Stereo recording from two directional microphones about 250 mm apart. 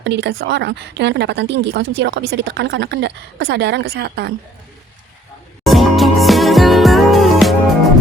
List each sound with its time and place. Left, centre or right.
0.0 s a woman's voice: right
5.6 s music: centre